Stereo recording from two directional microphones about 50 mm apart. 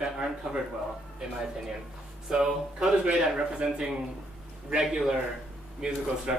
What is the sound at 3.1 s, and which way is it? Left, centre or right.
Speech, centre.